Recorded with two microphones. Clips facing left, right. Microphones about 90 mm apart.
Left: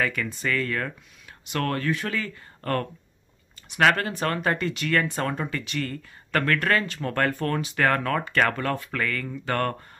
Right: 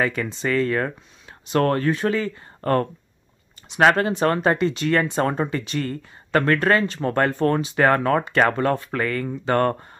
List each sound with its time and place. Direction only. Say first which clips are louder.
0.0 s speech: right 4 dB; 25° right (ahead or behind)